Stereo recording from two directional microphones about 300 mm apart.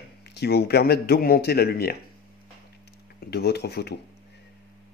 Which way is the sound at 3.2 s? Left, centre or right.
Left.